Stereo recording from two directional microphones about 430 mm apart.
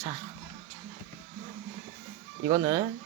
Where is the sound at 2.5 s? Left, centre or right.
Centre.